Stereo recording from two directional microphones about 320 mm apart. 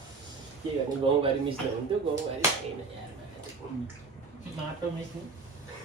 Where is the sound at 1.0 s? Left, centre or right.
Centre.